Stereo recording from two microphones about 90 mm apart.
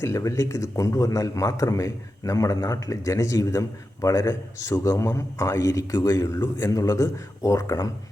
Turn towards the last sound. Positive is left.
turn(degrees=35)  # may be behind; listen again after turning